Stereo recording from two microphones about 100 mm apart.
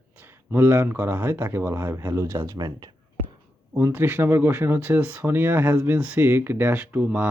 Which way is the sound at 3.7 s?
25° right (ahead or behind).